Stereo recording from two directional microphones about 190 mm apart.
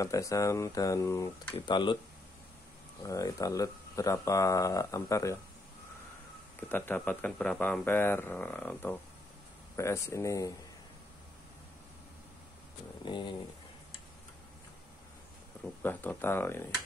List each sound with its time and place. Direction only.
0.0 s speech: 15° left (ahead or behind)
3.0 s speech: 20° left (ahead or behind)
6.7 s speech: 10° left (ahead or behind)
13.0 s a sound: 25° left (ahead or behind)
15.8 s speech: 10° left (ahead or behind)